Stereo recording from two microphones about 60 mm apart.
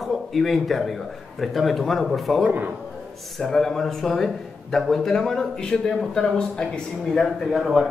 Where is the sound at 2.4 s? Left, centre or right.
Right.